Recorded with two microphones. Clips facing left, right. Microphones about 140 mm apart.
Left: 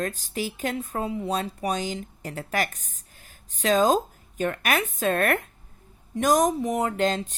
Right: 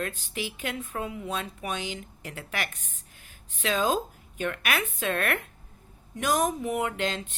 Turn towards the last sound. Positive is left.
turn(degrees=40)  # may be behind; listen again after turning